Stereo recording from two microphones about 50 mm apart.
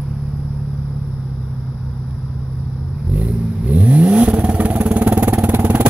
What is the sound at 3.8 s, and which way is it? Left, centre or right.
Vehicle, right.